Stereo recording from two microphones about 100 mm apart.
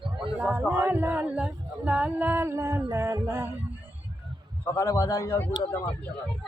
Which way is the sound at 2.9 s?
30° right (ahead or behind).